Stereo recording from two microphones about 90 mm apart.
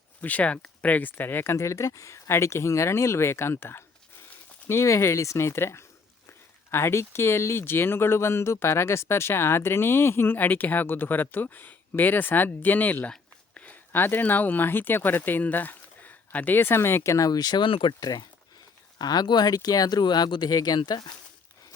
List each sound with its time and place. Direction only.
0.2 s speech: 15° left (ahead or behind)
1.5 s speech: 35° left (ahead or behind); by 17.7 s 50° left (ahead or behind)
17.7 s speech: 85° left
18.0 s speech: 45° left (ahead or behind)